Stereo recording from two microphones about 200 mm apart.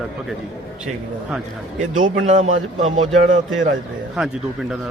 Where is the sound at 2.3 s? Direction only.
35° right (ahead or behind).